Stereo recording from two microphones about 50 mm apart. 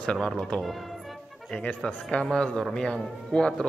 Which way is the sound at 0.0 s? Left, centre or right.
Centre.